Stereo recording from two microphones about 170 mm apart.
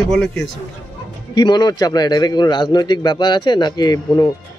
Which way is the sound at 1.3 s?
25° left (ahead or behind).